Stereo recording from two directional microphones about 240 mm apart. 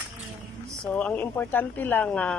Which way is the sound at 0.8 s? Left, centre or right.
Centre.